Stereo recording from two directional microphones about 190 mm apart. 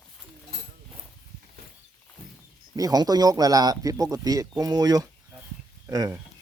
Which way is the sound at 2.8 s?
20° right (ahead or behind).